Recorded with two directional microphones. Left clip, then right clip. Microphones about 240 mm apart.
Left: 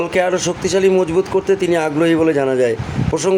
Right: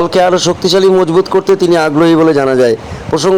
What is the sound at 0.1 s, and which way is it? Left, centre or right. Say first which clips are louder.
A man's voice: right 7 dB; right.